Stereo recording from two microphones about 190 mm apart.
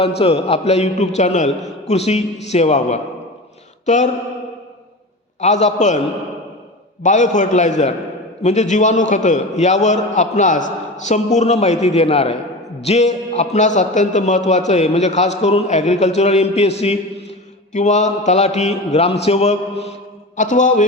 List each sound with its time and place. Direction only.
0.2 s a man's voice: 30° left (ahead or behind)
5.4 s a man's voice: 35° left (ahead or behind)
7.0 s a man's voice: 40° left (ahead or behind)